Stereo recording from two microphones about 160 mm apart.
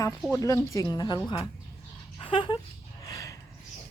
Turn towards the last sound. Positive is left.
turn(degrees=20)  # may be behind; listen again after turning